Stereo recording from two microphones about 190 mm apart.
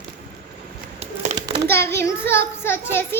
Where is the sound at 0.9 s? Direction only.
35° right (ahead or behind).